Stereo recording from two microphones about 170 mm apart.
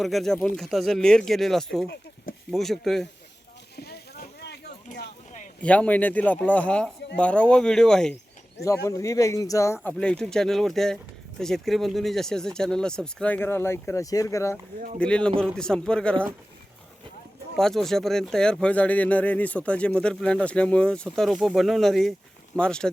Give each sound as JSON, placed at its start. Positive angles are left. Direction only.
{"t": 0.0, "sound": "speech", "side_deg": 0}
{"t": 3.8, "sound": "rowboat", "side_deg": 70}
{"t": 4.9, "sound": "a sound", "side_deg": 55}
{"t": 5.6, "sound": "speech", "side_deg": 5}
{"t": 8.6, "sound": "speech", "side_deg": 20}
{"t": 14.9, "sound": "speech", "side_deg": 5}
{"t": 17.6, "sound": "speech", "side_deg": 0}